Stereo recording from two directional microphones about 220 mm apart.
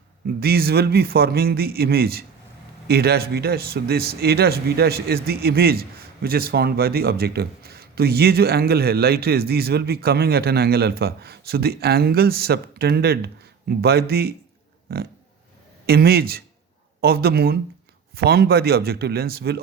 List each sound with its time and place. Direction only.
0.3 s speech: 45° right (ahead or behind)